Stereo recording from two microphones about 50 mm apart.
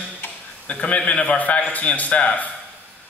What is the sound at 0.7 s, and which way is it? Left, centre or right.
A man's voice, left.